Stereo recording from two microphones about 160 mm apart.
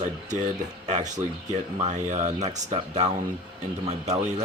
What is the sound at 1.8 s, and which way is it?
Speech, 50° right (ahead or behind).